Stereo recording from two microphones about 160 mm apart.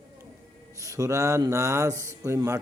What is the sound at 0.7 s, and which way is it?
A man's voice, 20° right (ahead or behind).